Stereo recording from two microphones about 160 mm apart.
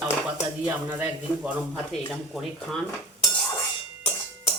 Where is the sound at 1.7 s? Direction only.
Centre (ahead or behind).